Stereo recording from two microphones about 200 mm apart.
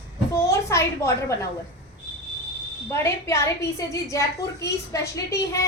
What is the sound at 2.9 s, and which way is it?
A woman's voice, 15° left (ahead or behind).